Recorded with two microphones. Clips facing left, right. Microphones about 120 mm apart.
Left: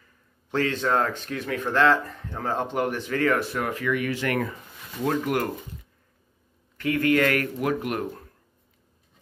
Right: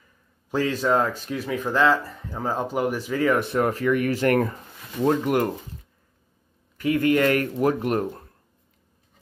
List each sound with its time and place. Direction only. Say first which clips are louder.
0.5 s speech: right 2 dB; 10° right (ahead or behind)
3.4 s speech: right 5 dB; 35° right (ahead or behind)
5.0 s a man's voice: right 4 dB; 20° right (ahead or behind)
6.8 s a man's voice: right 2 dB; 15° right (ahead or behind); by 8.3 s 30° right (ahead or behind)